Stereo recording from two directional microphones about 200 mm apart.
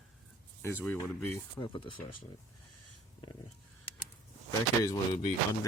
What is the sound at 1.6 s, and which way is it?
Speech, 25° left (ahead or behind).